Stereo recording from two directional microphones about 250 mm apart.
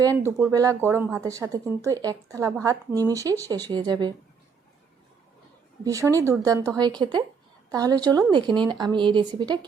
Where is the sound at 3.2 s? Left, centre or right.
Centre.